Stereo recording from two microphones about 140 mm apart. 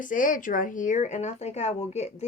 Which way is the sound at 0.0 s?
70° left (ahead or behind).